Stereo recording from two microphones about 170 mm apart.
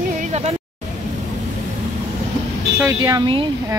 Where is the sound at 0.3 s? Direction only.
40° right (ahead or behind).